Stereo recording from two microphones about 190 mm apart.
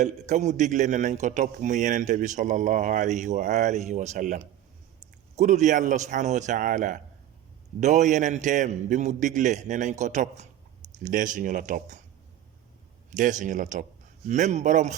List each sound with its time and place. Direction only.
0.0 s a man's voice: 35° right (ahead or behind)
5.4 s a man's voice: 40° right (ahead or behind)
13.1 s a man's voice: 40° right (ahead or behind)